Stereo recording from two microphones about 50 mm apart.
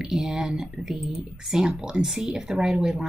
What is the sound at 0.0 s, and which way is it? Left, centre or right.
Speech, centre.